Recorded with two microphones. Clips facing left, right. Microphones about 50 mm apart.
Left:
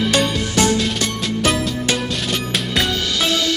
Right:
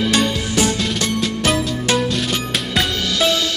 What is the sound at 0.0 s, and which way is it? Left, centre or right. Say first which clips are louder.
Music: even; centre.